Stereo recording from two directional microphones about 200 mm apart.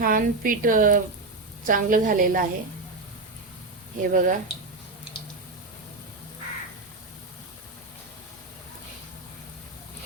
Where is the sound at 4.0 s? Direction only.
40° right (ahead or behind).